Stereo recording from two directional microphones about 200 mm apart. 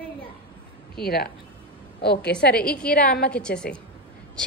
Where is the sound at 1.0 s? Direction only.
50° left (ahead or behind).